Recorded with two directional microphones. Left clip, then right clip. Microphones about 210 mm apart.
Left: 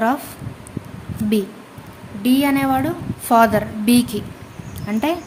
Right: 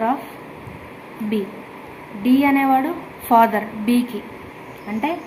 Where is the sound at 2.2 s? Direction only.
55° left (ahead or behind).